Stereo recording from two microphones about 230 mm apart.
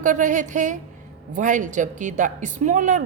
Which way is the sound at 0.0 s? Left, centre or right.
Right.